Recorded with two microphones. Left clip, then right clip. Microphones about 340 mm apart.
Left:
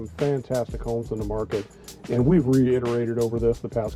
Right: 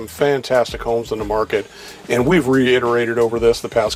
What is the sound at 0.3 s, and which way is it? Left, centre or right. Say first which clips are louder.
Speech: right 10 dB; centre.